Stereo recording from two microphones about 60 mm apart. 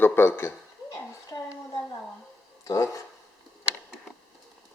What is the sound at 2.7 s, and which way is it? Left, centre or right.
Speech, left.